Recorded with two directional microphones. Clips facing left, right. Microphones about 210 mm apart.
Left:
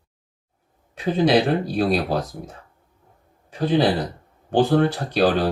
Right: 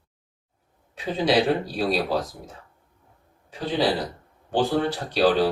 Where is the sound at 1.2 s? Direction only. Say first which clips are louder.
Left 1 dB; 55° left (ahead or behind).